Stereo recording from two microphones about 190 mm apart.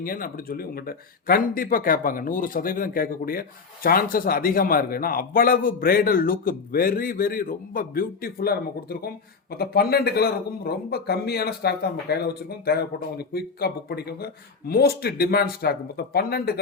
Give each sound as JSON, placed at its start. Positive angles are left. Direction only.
{"t": 0.0, "sound": "a man's voice", "side_deg": 50}